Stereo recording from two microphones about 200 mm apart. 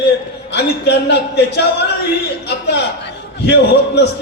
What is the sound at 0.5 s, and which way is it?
A man's voice, 60° left (ahead or behind).